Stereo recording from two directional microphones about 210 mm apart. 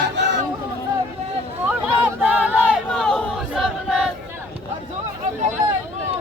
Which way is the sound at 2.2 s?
5° right (ahead or behind).